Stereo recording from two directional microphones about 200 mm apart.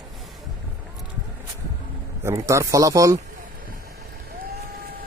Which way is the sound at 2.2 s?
15° right (ahead or behind).